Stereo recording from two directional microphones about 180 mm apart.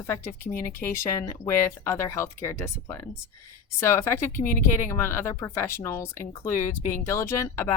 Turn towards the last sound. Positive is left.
turn(degrees=15)  # may be behind; listen again after turning